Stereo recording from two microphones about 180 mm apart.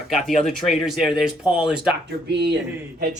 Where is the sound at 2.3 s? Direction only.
70° right (ahead or behind).